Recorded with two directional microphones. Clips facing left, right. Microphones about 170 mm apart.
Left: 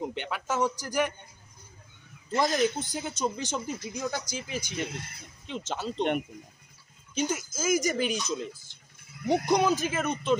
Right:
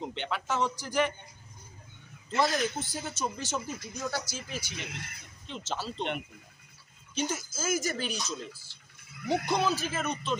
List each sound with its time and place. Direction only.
0.0 s speech: 10° left (ahead or behind)
2.2 s speech: 15° left (ahead or behind)
7.2 s speech: 10° left (ahead or behind)